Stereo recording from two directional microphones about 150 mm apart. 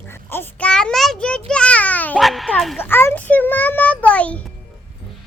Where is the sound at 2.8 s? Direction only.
15° left (ahead or behind).